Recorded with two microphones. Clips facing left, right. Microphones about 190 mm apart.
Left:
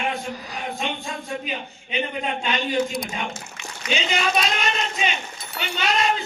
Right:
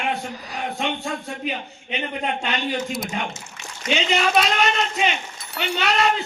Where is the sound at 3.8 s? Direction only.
70° right (ahead or behind).